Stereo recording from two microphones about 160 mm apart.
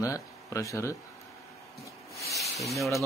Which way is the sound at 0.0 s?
20° left (ahead or behind).